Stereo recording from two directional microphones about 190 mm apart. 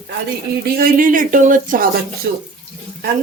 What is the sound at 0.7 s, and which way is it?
Speech, 50° right (ahead or behind).